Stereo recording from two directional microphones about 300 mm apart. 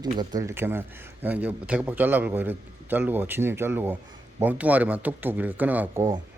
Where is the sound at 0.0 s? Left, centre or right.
Centre.